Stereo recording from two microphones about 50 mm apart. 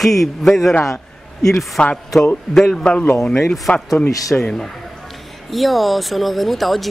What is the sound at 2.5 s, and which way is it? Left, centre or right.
Speech, centre.